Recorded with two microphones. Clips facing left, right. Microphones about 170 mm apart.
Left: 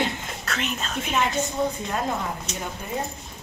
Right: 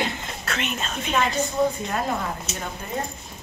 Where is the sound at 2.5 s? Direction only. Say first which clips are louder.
Even; 5° right (ahead or behind).